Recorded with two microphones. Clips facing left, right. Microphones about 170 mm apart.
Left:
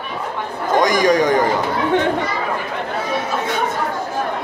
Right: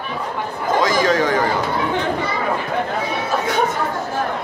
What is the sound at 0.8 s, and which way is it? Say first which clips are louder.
Speech: left 3 dB; 15° left (ahead or behind).